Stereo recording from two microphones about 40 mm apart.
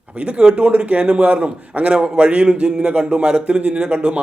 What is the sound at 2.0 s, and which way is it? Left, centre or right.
A man's voice, right.